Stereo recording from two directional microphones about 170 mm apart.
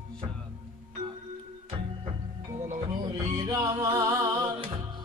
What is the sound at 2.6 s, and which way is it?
Music, 45° right (ahead or behind).